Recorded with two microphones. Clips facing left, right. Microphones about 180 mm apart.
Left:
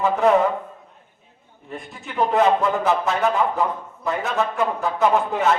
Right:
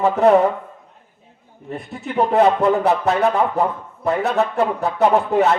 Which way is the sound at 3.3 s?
60° right (ahead or behind).